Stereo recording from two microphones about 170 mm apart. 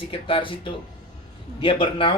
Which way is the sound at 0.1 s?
30° left (ahead or behind).